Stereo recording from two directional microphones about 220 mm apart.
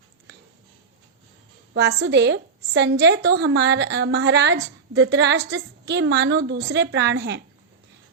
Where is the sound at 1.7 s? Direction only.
50° right (ahead or behind).